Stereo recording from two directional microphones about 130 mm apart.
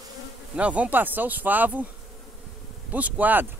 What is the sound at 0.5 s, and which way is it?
Speech, 10° right (ahead or behind).